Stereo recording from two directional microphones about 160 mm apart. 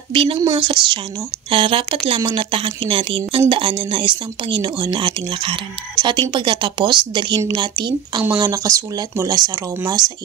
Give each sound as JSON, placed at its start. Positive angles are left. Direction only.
{"t": 0.1, "sound": "a woman's voice", "side_deg": -35}